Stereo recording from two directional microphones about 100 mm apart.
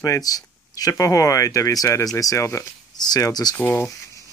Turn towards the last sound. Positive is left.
turn(degrees=20)  # may be behind; listen again after turning